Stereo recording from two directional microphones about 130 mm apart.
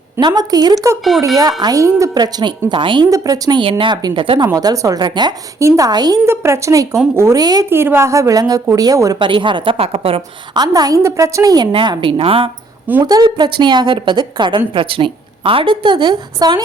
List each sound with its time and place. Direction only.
0.2 s a woman's voice: 30° right (ahead or behind)
3.1 s speech: 25° right (ahead or behind)
3.6 s a woman's voice: 40° right (ahead or behind)
4.4 s speech: 25° right (ahead or behind)
6.2 s speech: 20° right (ahead or behind)
7.7 s a woman's voice: 20° right (ahead or behind); by 10.6 s 45° right (ahead or behind)
10.6 s speech: 30° right (ahead or behind); by 12.5 s 45° right (ahead or behind)
13.1 s a woman's voice: 30° right (ahead or behind)